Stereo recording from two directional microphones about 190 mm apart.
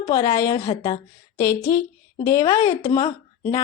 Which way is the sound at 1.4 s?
15° left (ahead or behind).